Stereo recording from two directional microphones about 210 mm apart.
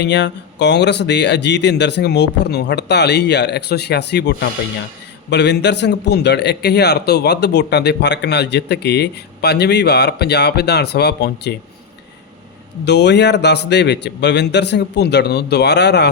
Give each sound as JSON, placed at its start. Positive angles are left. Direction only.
{"t": 0.0, "sound": "a man's voice", "side_deg": 55}
{"t": 12.8, "sound": "a man's voice", "side_deg": 55}